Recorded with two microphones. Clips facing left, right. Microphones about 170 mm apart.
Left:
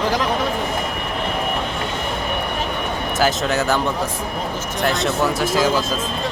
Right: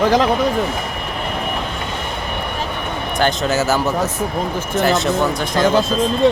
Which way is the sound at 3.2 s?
Centre (ahead or behind).